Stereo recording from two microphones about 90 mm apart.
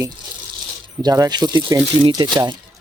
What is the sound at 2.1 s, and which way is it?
Speech, 50° right (ahead or behind).